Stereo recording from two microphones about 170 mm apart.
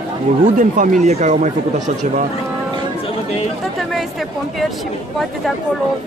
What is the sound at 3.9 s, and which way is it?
Speech, centre (ahead or behind).